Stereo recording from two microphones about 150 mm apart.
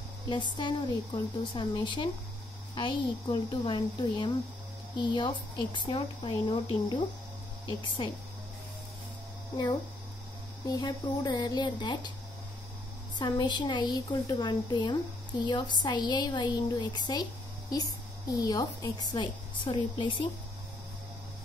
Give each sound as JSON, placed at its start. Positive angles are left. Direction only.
{"t": 0.3, "sound": "speech", "side_deg": 30}
{"t": 10.7, "sound": "a woman's voice", "side_deg": 30}
{"t": 13.2, "sound": "a woman's voice", "side_deg": 30}